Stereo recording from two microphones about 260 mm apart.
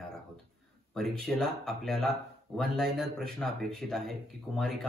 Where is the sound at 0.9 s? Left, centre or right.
Centre.